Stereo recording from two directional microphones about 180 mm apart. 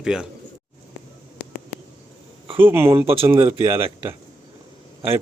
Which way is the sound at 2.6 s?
10° right (ahead or behind).